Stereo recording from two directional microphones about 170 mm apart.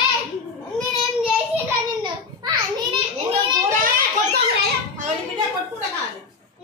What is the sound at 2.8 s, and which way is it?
Children playing, 35° right (ahead or behind).